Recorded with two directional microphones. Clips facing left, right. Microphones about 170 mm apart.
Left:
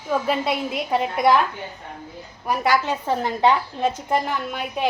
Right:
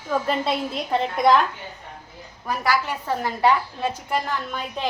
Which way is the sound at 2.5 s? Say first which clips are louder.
Left 3 dB; 20° left (ahead or behind).